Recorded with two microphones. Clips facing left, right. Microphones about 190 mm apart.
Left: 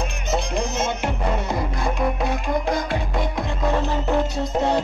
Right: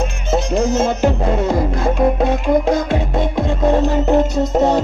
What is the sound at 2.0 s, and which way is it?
Music, 55° right (ahead or behind).